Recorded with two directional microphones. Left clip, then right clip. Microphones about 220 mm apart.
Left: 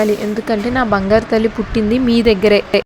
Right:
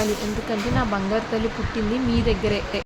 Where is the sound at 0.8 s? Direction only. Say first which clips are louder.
Left 13 dB; 30° left (ahead or behind).